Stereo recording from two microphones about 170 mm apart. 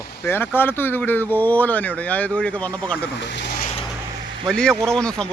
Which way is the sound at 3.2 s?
90° left.